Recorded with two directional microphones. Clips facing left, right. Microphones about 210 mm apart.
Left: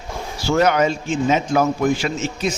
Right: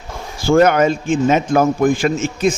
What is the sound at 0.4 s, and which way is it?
A man's voice, 50° right (ahead or behind).